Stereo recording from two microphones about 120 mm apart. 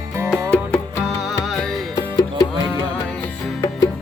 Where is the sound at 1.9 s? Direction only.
30° left (ahead or behind).